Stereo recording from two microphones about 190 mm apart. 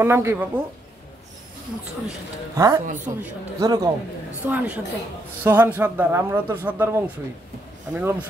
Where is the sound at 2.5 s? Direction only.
20° right (ahead or behind).